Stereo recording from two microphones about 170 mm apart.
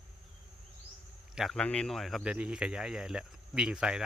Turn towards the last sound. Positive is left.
turn(degrees=-5)  # may be behind; listen again after turning